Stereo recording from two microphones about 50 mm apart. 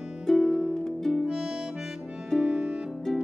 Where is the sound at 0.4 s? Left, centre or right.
Centre.